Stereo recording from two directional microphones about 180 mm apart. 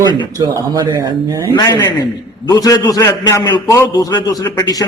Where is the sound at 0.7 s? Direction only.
20° right (ahead or behind).